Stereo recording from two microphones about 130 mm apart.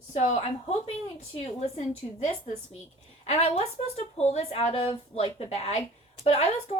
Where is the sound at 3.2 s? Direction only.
55° left (ahead or behind).